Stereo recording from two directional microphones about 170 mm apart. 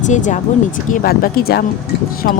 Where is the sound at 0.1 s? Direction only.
45° left (ahead or behind).